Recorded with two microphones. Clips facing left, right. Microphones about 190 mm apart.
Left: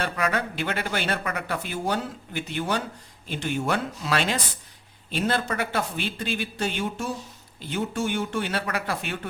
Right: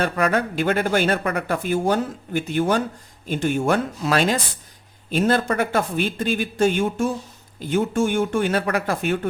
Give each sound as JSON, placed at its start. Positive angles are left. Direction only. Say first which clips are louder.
{"t": 0.0, "sound": "speech", "louder": "right 6 dB", "side_deg": -45}